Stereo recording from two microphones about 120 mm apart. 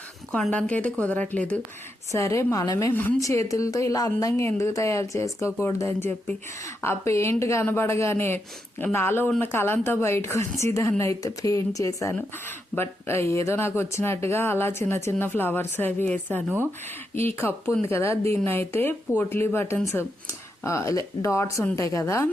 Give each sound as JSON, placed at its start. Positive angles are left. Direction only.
{"t": 0.3, "sound": "speech", "side_deg": 10}
{"t": 2.1, "sound": "speech", "side_deg": 25}
{"t": 2.9, "sound": "speech", "side_deg": 15}
{"t": 3.2, "sound": "speech", "side_deg": 25}